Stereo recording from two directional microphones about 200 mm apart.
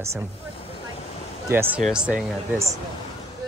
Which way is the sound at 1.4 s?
10° right (ahead or behind).